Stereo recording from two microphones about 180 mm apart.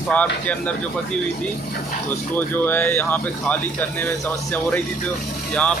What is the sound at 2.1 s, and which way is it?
Speech, 10° left (ahead or behind).